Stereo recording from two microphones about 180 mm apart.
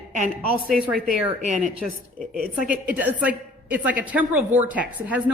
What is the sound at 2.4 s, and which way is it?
A woman's voice, 5° right (ahead or behind).